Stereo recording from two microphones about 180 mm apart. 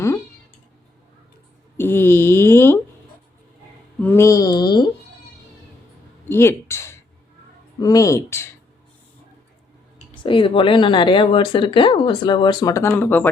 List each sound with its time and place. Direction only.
1.8 s a sound: 10° left (ahead or behind)
4.0 s speech: 15° left (ahead or behind)
6.2 s speech: 15° left (ahead or behind)
10.2 s speech: 30° left (ahead or behind); by 13.2 s 10° left (ahead or behind)